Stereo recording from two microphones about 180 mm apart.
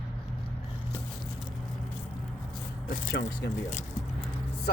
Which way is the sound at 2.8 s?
45° left (ahead or behind).